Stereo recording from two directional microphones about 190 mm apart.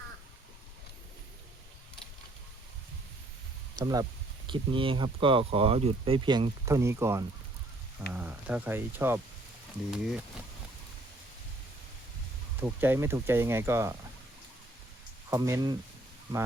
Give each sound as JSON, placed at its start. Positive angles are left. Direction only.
{"t": 3.8, "sound": "speech", "side_deg": -20}
{"t": 12.6, "sound": "speech", "side_deg": -10}
{"t": 15.3, "sound": "speech", "side_deg": -15}